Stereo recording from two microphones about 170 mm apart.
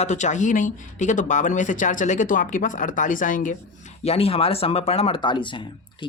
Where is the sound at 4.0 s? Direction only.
35° left (ahead or behind).